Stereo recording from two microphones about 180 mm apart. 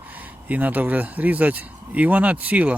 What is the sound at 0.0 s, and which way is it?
Speech, 10° right (ahead or behind).